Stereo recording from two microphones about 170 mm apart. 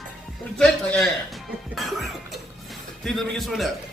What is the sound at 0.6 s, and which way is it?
Music, 5° left (ahead or behind).